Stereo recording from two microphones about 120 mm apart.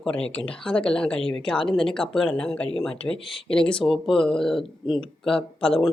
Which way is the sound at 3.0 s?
50° left (ahead or behind).